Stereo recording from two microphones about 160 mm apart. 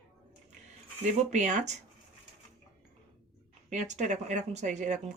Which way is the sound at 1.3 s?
50° right (ahead or behind).